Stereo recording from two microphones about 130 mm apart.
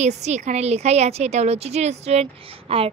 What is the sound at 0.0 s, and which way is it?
A woman's voice, 60° right (ahead or behind).